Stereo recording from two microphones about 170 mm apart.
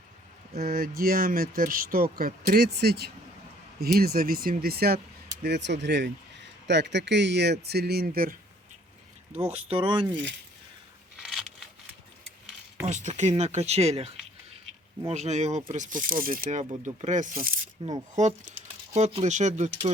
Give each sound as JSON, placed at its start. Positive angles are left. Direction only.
{"t": 0.6, "sound": "speech", "side_deg": -60}
{"t": 5.4, "sound": "speech", "side_deg": -85}
{"t": 9.3, "sound": "speech", "side_deg": -35}
{"t": 12.8, "sound": "speech", "side_deg": -45}
{"t": 18.1, "sound": "speech", "side_deg": -45}